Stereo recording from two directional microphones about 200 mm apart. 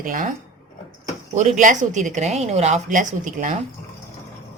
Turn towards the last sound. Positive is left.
turn(degrees=-40)  # may be behind; listen again after turning